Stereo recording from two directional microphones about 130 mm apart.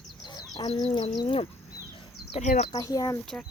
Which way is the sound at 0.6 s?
45° left (ahead or behind).